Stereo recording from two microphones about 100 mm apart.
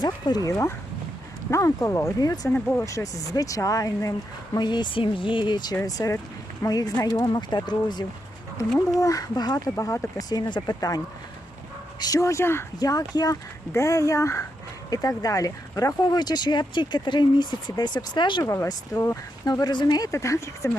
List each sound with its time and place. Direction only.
0.0 s speech: 45° left (ahead or behind)
4.5 s speech: 50° left (ahead or behind)
5.8 s speech: 35° left (ahead or behind)
9.0 s speech: 35° left (ahead or behind)
12.8 s speech: 40° left (ahead or behind)
18.4 s speech: 25° left (ahead or behind)
18.9 s speech: 40° left (ahead or behind)